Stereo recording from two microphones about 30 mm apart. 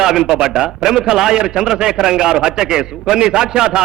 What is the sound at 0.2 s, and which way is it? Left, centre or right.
A man's voice, right.